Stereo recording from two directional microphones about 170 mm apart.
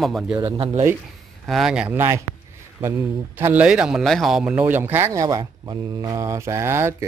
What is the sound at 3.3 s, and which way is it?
Speech, 10° right (ahead or behind).